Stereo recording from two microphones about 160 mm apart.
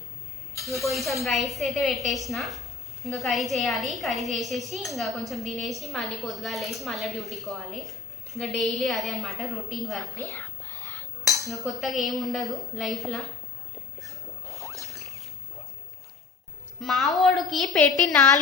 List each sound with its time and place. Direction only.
0.5 s a woman's voice: centre (ahead or behind)
10.2 s whispering: 15° left (ahead or behind)
11.3 s a woman's voice: centre (ahead or behind)
14.0 s rodents: centre (ahead or behind)
16.8 s a woman's voice: centre (ahead or behind)